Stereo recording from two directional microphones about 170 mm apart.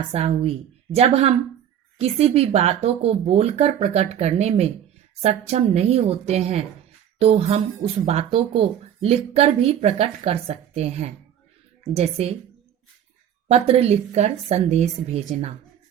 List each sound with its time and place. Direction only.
0.1 s speech: 40° right (ahead or behind)
13.5 s speech: 35° right (ahead or behind)